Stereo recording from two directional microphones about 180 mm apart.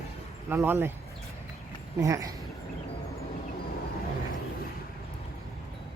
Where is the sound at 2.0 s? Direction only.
20° right (ahead or behind).